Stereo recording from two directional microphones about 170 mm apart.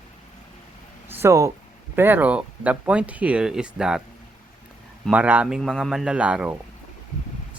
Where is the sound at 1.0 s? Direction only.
15° right (ahead or behind).